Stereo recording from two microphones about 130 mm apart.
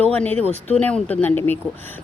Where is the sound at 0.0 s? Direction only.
10° left (ahead or behind).